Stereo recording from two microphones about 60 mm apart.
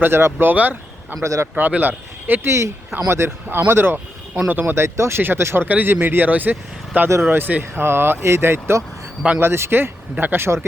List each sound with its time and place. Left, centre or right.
0.0 s speech: right
0.5 s speech: right
1.2 s a man's voice: right
1.5 s speech: right
2.5 s speech: right
4.7 s speech: right
5.6 s speech: right